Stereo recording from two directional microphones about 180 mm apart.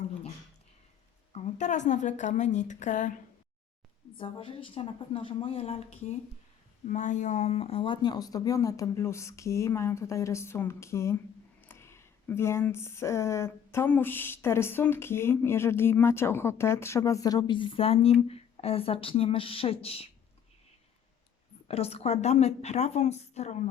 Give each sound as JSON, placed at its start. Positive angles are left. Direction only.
{"t": 1.3, "sound": "a woman's voice", "side_deg": 40}
{"t": 4.2, "sound": "a woman's voice", "side_deg": 30}
{"t": 21.7, "sound": "a woman's voice", "side_deg": 35}